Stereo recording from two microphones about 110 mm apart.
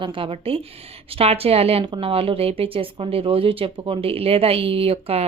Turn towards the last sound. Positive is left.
turn(degrees=-65)  # may be behind; listen again after turning